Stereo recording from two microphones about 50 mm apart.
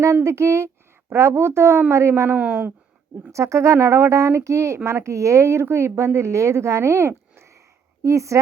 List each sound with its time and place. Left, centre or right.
0.2 s speech: right
2.3 s speech: right
3.3 s a woman's voice: right
8.0 s a woman's voice: right